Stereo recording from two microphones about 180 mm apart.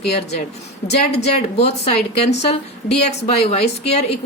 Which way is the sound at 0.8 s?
65° left (ahead or behind).